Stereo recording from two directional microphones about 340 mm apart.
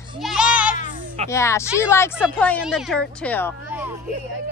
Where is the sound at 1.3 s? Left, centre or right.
Centre.